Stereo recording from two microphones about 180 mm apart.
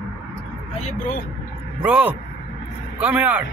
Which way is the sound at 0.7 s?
40° left (ahead or behind).